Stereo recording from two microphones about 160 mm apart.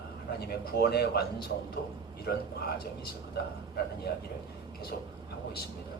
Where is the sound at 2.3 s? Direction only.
80° left.